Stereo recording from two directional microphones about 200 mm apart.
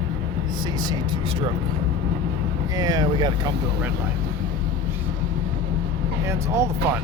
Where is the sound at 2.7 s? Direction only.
20° right (ahead or behind).